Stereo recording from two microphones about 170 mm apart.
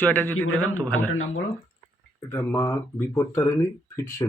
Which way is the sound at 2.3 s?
15° left (ahead or behind).